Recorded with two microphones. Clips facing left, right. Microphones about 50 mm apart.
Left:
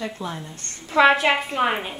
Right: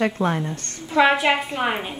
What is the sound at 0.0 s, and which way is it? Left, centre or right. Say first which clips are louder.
Speech: right 9 dB; right.